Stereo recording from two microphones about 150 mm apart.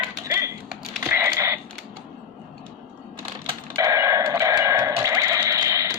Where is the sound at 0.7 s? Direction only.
15° right (ahead or behind).